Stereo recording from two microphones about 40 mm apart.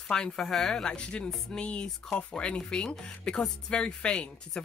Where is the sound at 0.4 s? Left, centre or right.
Centre.